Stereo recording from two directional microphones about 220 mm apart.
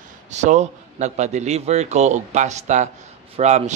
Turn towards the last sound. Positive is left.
turn(degrees=-30)  # may be behind; listen again after turning